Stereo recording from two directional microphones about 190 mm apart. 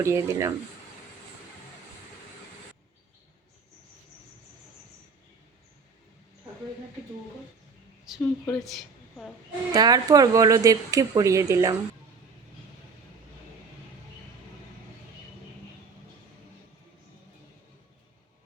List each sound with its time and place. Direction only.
0.0 s speech: 15° right (ahead or behind)
8.2 s speech: 15° left (ahead or behind)
8.6 s a sound: centre (ahead or behind)
9.7 s speech: 20° right (ahead or behind)